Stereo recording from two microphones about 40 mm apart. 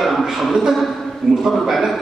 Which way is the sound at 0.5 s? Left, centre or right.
Centre.